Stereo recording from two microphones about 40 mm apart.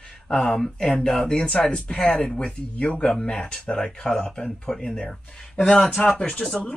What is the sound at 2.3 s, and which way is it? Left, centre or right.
Speech, left.